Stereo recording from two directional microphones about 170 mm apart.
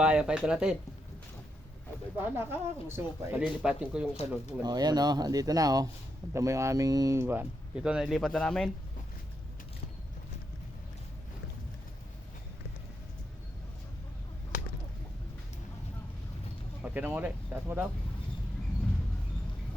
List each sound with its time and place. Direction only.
0.0 s speech: 5° right (ahead or behind)
2.1 s speech: 15° right (ahead or behind)
4.6 s speech: 25° right (ahead or behind); by 8.7 s 5° left (ahead or behind)
16.8 s speech: 10° right (ahead or behind)